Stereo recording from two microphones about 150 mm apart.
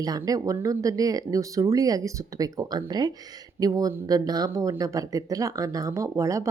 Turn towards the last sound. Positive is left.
turn(degrees=-20)  # may be behind; listen again after turning